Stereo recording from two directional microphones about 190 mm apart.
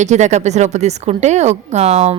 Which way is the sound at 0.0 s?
40° right (ahead or behind).